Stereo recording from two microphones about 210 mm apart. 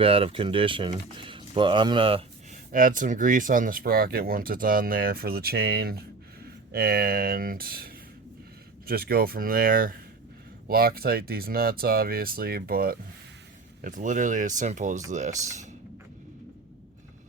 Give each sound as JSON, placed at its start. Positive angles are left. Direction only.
{"t": 0.0, "sound": "speech", "side_deg": -25}
{"t": 2.7, "sound": "speech", "side_deg": -40}